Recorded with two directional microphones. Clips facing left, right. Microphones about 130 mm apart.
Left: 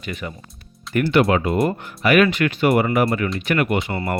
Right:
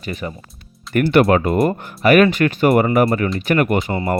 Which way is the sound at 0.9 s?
50° right (ahead or behind).